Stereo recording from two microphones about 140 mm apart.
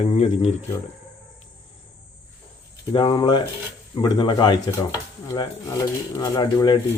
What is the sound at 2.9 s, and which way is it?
Speech, 35° left (ahead or behind).